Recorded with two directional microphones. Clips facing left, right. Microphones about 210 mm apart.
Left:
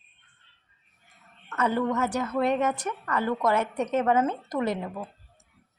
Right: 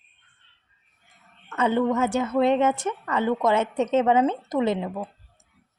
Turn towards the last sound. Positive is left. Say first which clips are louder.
# right 4 dB
turn(degrees=-20)  # may be behind; listen again after turning